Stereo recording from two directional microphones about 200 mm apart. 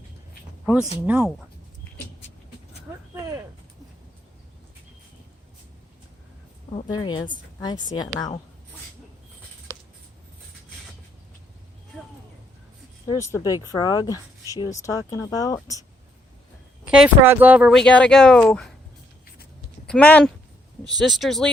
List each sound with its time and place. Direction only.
0.6 s speech: 5° right (ahead or behind)
6.9 s speech: 20° left (ahead or behind)
9.7 s a sound: 15° left (ahead or behind)
13.1 s speech: 15° left (ahead or behind)
16.8 s speech: 5° right (ahead or behind)
19.9 s speech: 5° left (ahead or behind)